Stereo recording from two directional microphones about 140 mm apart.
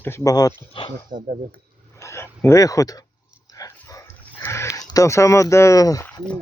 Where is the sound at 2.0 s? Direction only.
20° left (ahead or behind).